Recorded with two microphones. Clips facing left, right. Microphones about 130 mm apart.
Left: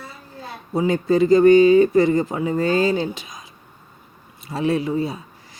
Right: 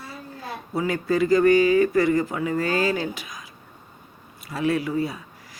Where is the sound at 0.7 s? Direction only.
25° left (ahead or behind).